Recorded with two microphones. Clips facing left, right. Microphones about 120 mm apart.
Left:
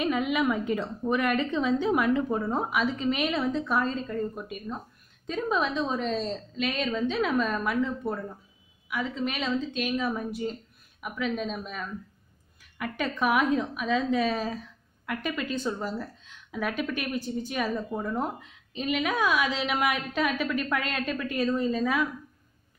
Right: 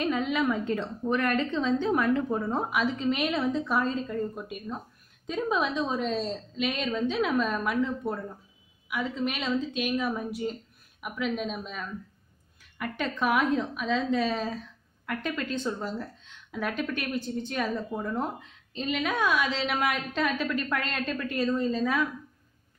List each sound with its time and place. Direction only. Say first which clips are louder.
0.0 s a woman's voice: left 1 dB; 10° left (ahead or behind)